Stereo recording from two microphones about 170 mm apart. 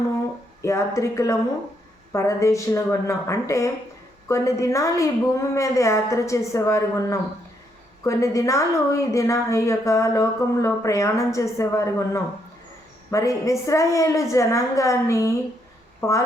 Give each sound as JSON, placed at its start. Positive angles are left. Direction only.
{"t": 0.6, "sound": "a woman's voice", "side_deg": 15}